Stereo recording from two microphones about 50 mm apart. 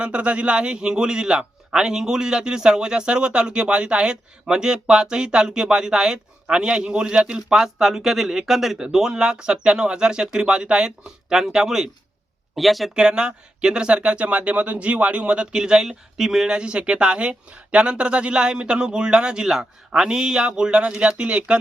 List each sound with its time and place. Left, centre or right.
0.0 s a man's voice: right
12.5 s speech: centre
13.0 s speech: centre
16.5 s speech: centre